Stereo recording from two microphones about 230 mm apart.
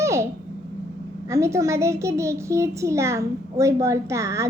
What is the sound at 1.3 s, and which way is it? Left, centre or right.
A child's voice, centre.